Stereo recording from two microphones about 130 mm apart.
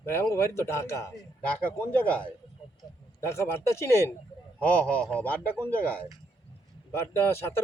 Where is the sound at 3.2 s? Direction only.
20° left (ahead or behind).